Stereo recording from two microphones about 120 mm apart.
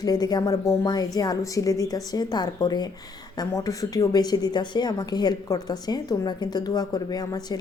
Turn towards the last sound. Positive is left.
turn(degrees=35)  # may be behind; listen again after turning